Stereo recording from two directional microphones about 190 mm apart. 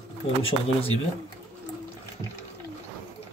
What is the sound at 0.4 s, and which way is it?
Speech, 30° left (ahead or behind).